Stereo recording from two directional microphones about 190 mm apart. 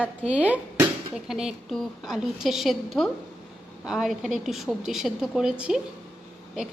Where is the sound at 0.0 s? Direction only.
5° right (ahead or behind).